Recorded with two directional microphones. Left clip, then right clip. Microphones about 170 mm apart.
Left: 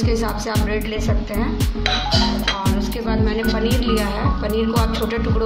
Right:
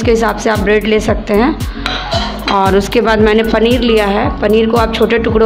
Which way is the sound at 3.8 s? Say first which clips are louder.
Right 11 dB; 40° right (ahead or behind).